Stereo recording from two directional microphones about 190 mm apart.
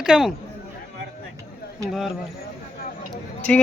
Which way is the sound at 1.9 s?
Centre (ahead or behind).